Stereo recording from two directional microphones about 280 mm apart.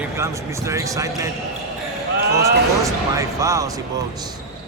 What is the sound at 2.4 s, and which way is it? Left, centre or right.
A man's voice, centre.